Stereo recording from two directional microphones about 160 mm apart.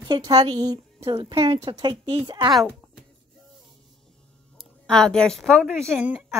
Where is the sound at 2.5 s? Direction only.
Centre (ahead or behind).